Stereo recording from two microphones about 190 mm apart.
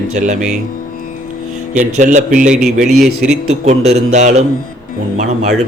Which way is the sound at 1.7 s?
40° right (ahead or behind).